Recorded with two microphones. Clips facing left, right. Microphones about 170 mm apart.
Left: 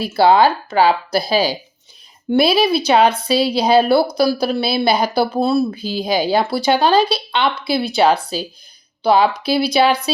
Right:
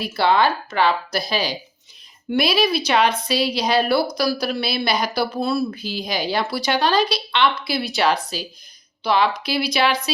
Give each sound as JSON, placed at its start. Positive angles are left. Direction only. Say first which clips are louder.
{"t": 0.1, "sound": "speech", "louder": "left 6 dB", "side_deg": 35}